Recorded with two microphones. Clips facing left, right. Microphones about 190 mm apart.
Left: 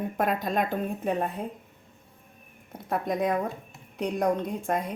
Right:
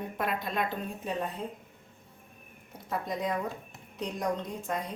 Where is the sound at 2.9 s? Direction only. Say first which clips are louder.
Left 6 dB; 55° left (ahead or behind).